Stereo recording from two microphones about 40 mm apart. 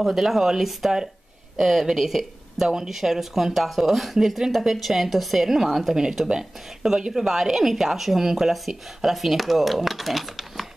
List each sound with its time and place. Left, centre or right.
0.0 s speech: centre
5.9 s speech: centre